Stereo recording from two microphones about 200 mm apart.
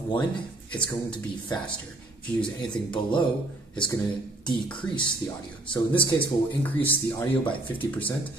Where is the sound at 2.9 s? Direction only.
25° left (ahead or behind).